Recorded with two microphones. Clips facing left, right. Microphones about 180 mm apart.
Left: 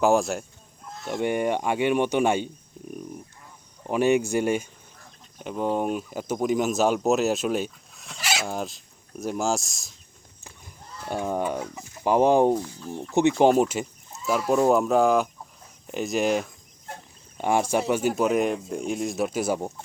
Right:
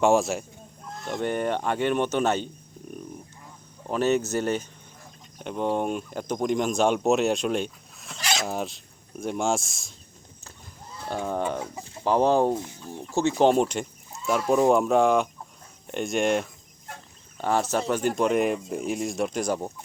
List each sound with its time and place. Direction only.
0.0 s speech: centre (ahead or behind)
0.9 s a sound: centre (ahead or behind)
1.1 s speech: 10° left (ahead or behind)
3.8 s speech: 10° left (ahead or behind)
11.3 s speech: 10° left (ahead or behind)
11.6 s chicken: 30° right (ahead or behind)
12.0 s speech: 15° left (ahead or behind)
12.5 s fowl: 20° right (ahead or behind)
13.4 s speech: 5° left (ahead or behind)
17.3 s speech: 15° left (ahead or behind)